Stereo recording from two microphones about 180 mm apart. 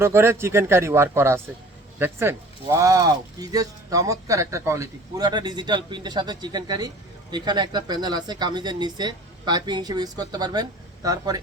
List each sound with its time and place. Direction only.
0.0 s speech: 15° right (ahead or behind)